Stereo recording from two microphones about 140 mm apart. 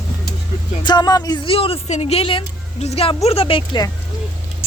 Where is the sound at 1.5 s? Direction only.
40° left (ahead or behind).